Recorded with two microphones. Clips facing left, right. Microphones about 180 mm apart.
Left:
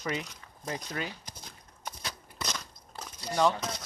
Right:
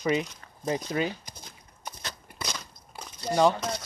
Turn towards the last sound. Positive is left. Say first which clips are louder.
# right 4 dB
turn(degrees=-20)  # may be behind; listen again after turning